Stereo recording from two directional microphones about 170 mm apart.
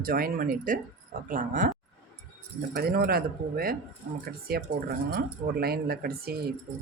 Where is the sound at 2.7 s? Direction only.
65° right (ahead or behind).